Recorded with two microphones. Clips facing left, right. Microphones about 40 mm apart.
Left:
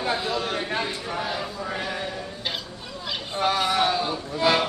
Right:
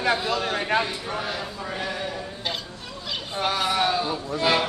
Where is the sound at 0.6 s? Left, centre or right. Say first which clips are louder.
Right 4 dB; right.